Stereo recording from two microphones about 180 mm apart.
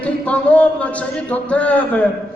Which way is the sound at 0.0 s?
5° left (ahead or behind).